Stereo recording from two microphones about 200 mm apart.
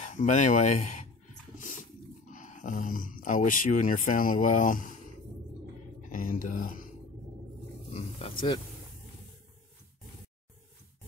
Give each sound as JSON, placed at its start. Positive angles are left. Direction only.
{"t": 0.0, "sound": "speech", "side_deg": 40}
{"t": 6.1, "sound": "speech", "side_deg": 40}
{"t": 7.9, "sound": "speech", "side_deg": 25}